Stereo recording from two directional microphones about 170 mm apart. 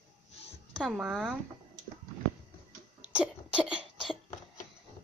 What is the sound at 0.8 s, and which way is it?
Speech, 5° right (ahead or behind).